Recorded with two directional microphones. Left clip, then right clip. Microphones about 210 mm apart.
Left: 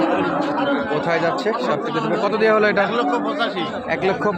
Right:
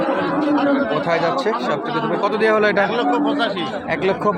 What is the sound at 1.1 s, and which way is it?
Speech, 5° left (ahead or behind).